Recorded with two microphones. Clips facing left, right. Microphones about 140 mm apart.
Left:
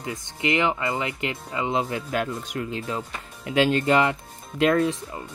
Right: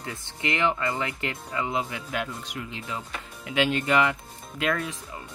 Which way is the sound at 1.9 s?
40° left (ahead or behind).